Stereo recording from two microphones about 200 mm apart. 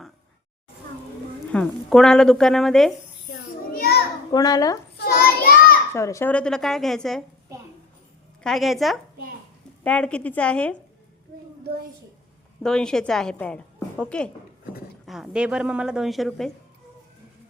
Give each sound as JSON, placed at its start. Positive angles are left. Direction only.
{"t": 1.5, "sound": "a woman's voice", "side_deg": 5}
{"t": 3.8, "sound": "children playing", "side_deg": 50}
{"t": 4.3, "sound": "a child's voice", "side_deg": 20}
{"t": 4.9, "sound": "child singing", "side_deg": 50}
{"t": 5.9, "sound": "a woman's voice", "side_deg": 15}
{"t": 8.4, "sound": "a woman's voice", "side_deg": 0}
{"t": 12.6, "sound": "a woman's voice", "side_deg": 5}